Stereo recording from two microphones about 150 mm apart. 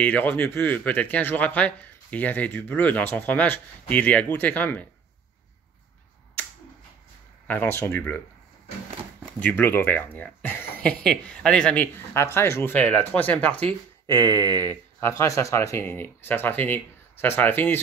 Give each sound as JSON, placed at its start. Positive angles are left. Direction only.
{"t": 0.0, "sound": "speech", "side_deg": 10}
{"t": 7.4, "sound": "speech", "side_deg": 15}
{"t": 9.4, "sound": "speech", "side_deg": 10}
{"t": 14.0, "sound": "a sound", "side_deg": -30}
{"t": 15.0, "sound": "speech", "side_deg": 20}